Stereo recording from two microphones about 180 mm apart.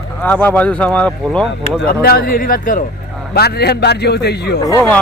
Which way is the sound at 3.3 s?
60° left (ahead or behind).